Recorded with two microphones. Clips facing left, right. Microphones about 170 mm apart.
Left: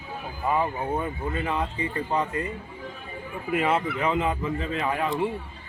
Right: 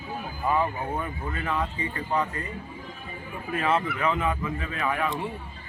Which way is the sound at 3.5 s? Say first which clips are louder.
Left 1 dB; 15° left (ahead or behind).